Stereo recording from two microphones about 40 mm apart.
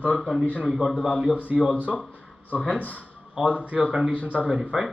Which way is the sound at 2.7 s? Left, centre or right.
Right.